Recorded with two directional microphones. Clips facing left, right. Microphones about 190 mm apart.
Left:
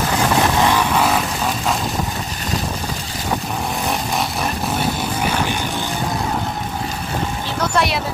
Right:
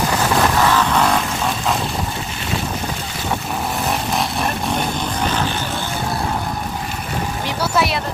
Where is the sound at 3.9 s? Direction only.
Centre (ahead or behind).